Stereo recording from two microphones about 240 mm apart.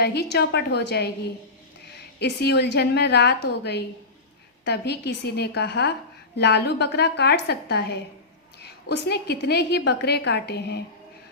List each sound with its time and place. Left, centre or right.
0.0 s a woman's voice: left
2.1 s a woman's voice: left